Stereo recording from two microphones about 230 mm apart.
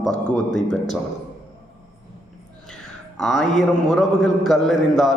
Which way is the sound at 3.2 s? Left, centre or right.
Centre.